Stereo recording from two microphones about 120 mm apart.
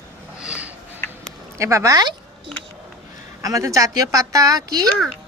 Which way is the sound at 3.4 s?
25° right (ahead or behind).